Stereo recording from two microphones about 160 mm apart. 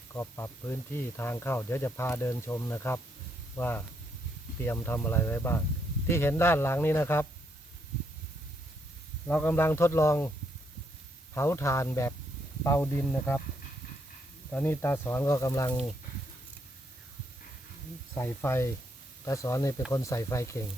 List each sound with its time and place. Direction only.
0.1 s speech: 15° left (ahead or behind)
9.2 s speech: 10° left (ahead or behind)
11.3 s speech: 15° left (ahead or behind)
14.5 s speech: 15° left (ahead or behind)
18.1 s speech: 15° left (ahead or behind)